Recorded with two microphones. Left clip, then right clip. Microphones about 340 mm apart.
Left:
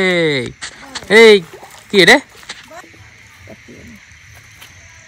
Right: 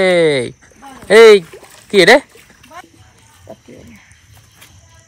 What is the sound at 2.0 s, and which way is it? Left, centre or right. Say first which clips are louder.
Speech: right 1 dB; centre.